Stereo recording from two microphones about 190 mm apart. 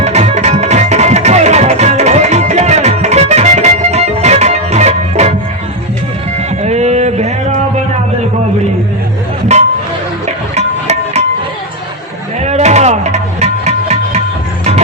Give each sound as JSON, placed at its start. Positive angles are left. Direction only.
{"t": 0.0, "sound": "music", "side_deg": -35}
{"t": 6.6, "sound": "a sound", "side_deg": -35}
{"t": 9.5, "sound": "music", "side_deg": -35}
{"t": 12.4, "sound": "music", "side_deg": -35}